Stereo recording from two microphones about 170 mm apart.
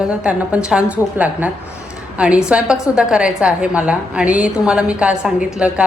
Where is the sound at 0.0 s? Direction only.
5° right (ahead or behind).